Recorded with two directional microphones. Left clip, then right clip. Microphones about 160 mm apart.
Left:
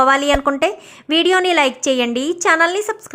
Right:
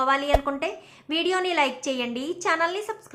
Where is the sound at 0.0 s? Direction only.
50° left (ahead or behind).